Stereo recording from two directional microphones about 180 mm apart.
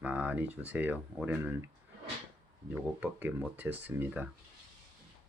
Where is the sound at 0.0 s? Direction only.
10° right (ahead or behind).